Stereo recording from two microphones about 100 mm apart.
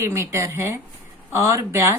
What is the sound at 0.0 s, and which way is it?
Speech, 25° right (ahead or behind).